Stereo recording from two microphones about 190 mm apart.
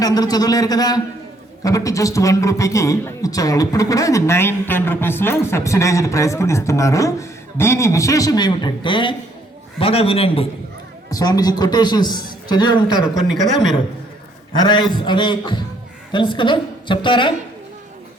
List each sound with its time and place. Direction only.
0.0 s a man's voice: 20° left (ahead or behind)
11.1 s a man's voice: 20° left (ahead or behind)
14.5 s a man's voice: 20° left (ahead or behind)